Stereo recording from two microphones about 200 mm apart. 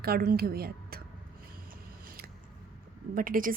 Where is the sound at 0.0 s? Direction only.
50° right (ahead or behind).